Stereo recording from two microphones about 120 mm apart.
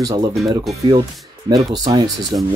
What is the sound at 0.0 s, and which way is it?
Speech, 35° right (ahead or behind).